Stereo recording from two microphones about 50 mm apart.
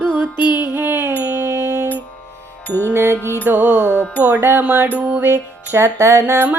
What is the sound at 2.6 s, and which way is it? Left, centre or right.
Music, left.